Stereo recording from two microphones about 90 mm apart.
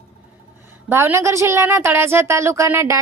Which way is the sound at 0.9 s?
30° right (ahead or behind).